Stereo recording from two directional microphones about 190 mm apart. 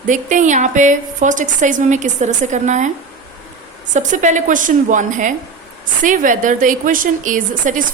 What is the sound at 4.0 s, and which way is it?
A woman's voice, 40° right (ahead or behind).